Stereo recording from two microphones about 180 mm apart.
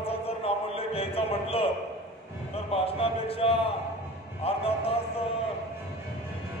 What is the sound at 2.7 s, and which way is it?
Speech, 35° left (ahead or behind).